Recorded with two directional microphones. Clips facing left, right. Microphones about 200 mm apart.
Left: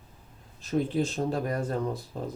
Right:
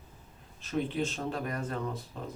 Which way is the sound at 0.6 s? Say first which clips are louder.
Left 4 dB; 35° left (ahead or behind).